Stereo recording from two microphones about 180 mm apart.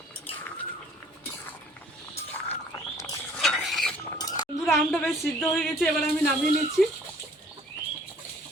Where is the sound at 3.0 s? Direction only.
20° left (ahead or behind).